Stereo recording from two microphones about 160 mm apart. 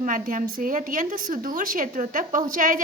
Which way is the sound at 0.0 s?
55° right (ahead or behind).